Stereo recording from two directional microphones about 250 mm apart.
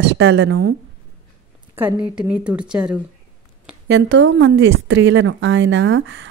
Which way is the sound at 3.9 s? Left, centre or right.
Right.